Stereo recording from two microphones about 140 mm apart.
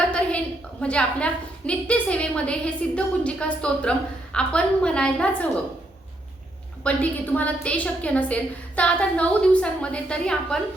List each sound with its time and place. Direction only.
0.1 s a woman's voice: 10° left (ahead or behind)
6.8 s a woman's voice: 10° left (ahead or behind)